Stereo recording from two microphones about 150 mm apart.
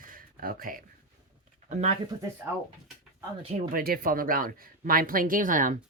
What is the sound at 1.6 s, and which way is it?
Speech, 50° right (ahead or behind).